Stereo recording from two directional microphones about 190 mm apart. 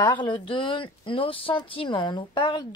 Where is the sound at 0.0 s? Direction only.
25° left (ahead or behind).